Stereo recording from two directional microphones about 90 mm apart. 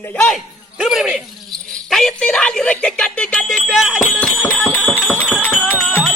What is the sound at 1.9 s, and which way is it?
Speech, 5° left (ahead or behind).